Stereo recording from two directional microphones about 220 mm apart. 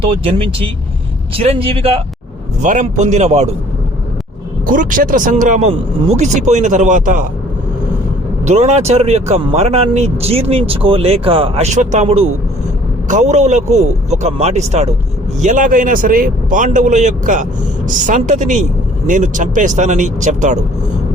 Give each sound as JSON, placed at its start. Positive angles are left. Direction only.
{"t": 0.0, "sound": "speech", "side_deg": -25}
{"t": 4.6, "sound": "speech", "side_deg": -40}
{"t": 8.4, "sound": "speech", "side_deg": -30}